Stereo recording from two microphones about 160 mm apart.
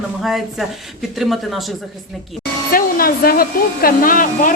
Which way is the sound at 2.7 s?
65° left (ahead or behind).